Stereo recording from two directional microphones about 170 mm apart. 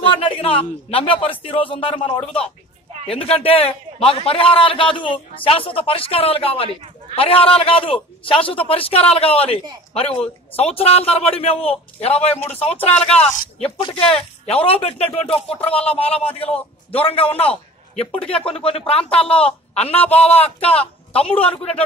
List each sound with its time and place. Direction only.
0.0 s a man's voice: 30° left (ahead or behind)